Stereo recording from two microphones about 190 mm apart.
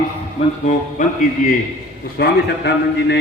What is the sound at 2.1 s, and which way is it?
A man's voice, 60° left (ahead or behind).